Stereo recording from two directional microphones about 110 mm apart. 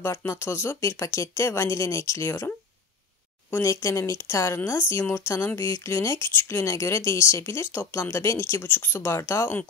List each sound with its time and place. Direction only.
0.0 s speech: 25° left (ahead or behind)
3.5 s speech: 30° left (ahead or behind)